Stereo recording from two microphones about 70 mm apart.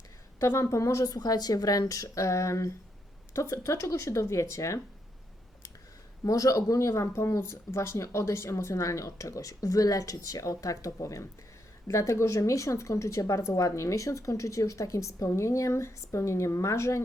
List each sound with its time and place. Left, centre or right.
0.3 s speech: left
1.1 s speech: left
6.2 s speech: left